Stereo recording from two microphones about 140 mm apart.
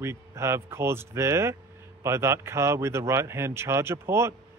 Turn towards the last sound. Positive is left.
turn(degrees=-20)  # may be behind; listen again after turning